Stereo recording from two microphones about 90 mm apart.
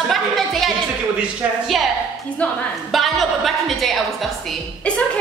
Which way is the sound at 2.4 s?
15° left (ahead or behind).